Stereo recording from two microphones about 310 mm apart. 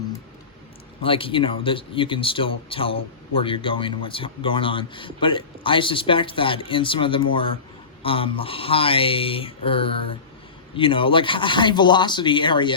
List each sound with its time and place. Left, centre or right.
1.0 s speech: centre